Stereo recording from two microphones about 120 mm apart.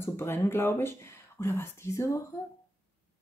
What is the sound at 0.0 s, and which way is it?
Speech, 20° left (ahead or behind).